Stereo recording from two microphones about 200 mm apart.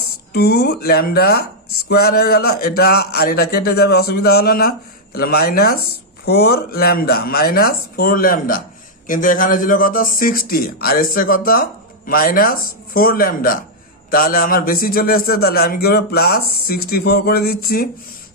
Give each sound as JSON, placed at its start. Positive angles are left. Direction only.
{"t": 0.0, "sound": "speech", "side_deg": 55}